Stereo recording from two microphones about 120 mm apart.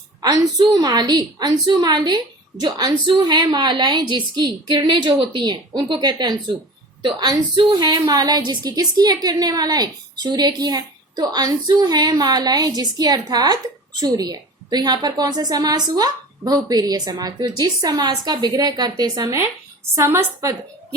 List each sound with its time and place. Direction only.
0.2 s a woman's voice: 35° right (ahead or behind)